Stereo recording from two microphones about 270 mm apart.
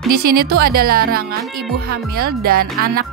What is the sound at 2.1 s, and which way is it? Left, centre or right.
Speech, right.